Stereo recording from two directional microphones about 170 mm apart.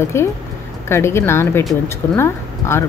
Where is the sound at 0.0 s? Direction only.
15° left (ahead or behind).